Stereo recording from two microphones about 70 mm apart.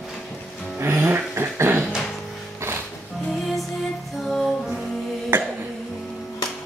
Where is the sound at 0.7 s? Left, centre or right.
Right.